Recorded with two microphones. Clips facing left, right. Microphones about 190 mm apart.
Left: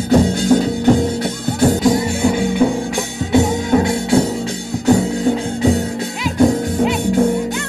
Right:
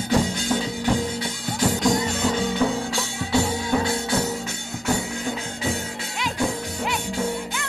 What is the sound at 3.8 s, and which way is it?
Music, 30° left (ahead or behind).